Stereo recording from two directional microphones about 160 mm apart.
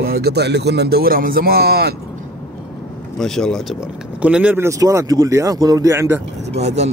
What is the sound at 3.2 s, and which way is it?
Speech, 5° left (ahead or behind).